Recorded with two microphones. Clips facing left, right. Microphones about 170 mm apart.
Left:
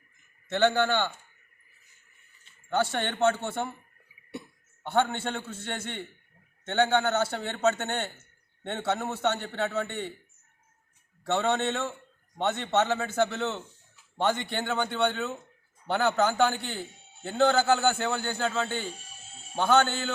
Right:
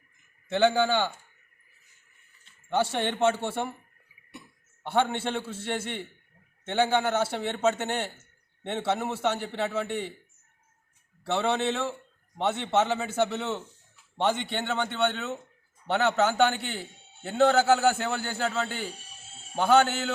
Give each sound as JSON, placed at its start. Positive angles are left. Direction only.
{"t": 0.5, "sound": "a man's voice", "side_deg": -10}
{"t": 2.6, "sound": "a man's voice", "side_deg": -10}
{"t": 4.8, "sound": "a man's voice", "side_deg": -5}
{"t": 11.3, "sound": "a man's voice", "side_deg": -10}
{"t": 15.9, "sound": "a man's voice", "side_deg": -5}